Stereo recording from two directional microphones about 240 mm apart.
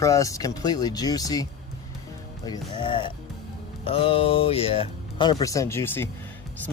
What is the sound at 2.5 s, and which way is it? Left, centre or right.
Speech, centre.